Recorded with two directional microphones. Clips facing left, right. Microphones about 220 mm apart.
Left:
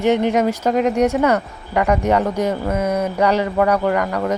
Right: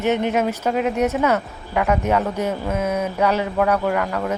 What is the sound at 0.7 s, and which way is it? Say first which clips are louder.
Speech: left 4 dB; 5° right (ahead or behind).